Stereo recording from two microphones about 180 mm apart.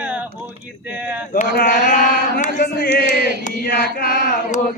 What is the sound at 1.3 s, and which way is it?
Speech, 55° left (ahead or behind).